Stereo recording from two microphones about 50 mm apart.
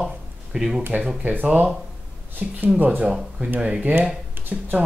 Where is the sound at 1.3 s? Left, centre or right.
Right.